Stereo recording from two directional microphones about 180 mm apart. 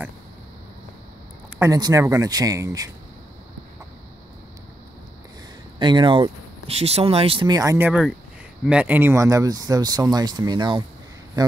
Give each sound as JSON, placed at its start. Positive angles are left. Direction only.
{"t": 1.6, "sound": "speech", "side_deg": -20}
{"t": 5.8, "sound": "speech", "side_deg": -25}